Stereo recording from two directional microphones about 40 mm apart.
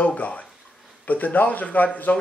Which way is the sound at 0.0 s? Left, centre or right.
Left.